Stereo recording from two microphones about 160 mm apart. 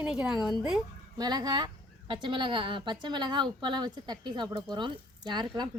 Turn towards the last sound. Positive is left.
turn(degrees=-30)  # may be behind; listen again after turning